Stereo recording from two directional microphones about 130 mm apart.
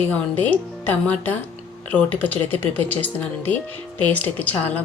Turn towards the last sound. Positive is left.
turn(degrees=10)  # may be behind; listen again after turning